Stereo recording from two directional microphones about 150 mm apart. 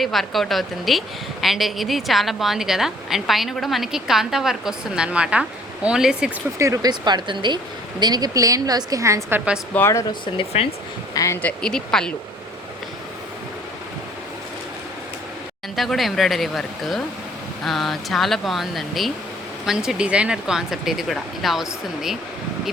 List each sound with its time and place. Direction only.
0.0 s a woman's voice: centre (ahead or behind)
6.6 s speech: 25° right (ahead or behind)
9.7 s speech: 15° left (ahead or behind)
10.5 s speech: 45° left (ahead or behind)
11.1 s speech: 20° left (ahead or behind)
11.4 s a woman's voice: 5° left (ahead or behind)
15.7 s a woman's voice: centre (ahead or behind)